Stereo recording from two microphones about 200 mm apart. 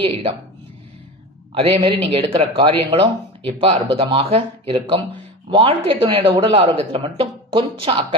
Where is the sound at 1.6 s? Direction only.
30° right (ahead or behind).